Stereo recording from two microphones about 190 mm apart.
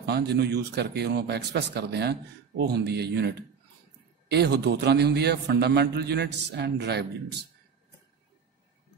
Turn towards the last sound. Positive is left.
turn(degrees=-60)  # may be behind; listen again after turning